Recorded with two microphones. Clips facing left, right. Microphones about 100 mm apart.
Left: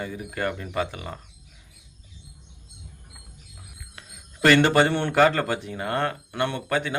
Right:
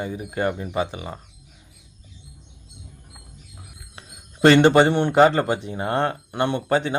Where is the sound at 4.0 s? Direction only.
30° right (ahead or behind).